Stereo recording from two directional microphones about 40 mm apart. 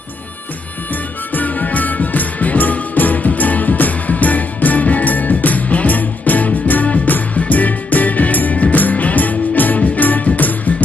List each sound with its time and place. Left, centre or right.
1.3 s music: left